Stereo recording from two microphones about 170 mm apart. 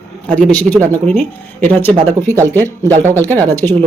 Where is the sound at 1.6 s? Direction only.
10° left (ahead or behind).